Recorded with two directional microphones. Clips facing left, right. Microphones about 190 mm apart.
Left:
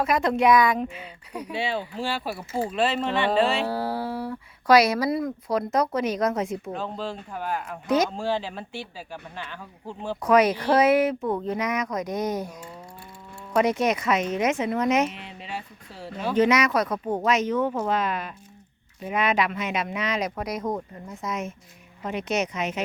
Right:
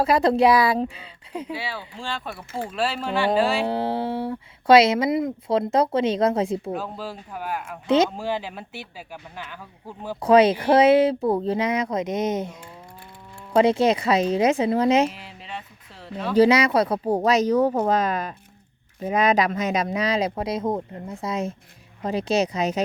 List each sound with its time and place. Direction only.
0.0 s speech: 35° right (ahead or behind)
1.5 s speech: 25° left (ahead or behind)
2.3 s speech: 5° left (ahead or behind)
3.7 s speech: 25° right (ahead or behind)
6.7 s speech: 10° right (ahead or behind)
7.9 s speech: 25° right (ahead or behind)
8.1 s speech: 10° right (ahead or behind)
10.2 s speech: 30° right (ahead or behind)
15.1 s speech: centre (ahead or behind)
16.3 s speech: 30° right (ahead or behind)